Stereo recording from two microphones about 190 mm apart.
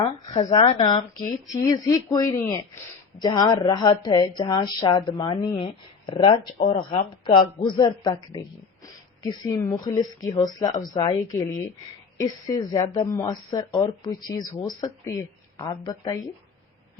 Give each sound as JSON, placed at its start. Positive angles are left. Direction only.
{"t": 0.0, "sound": "speech", "side_deg": 25}